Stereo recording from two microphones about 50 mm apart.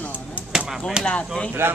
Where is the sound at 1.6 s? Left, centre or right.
Right.